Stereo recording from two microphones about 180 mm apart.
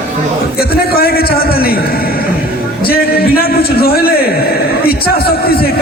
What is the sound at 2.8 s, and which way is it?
A man's voice, 55° left (ahead or behind).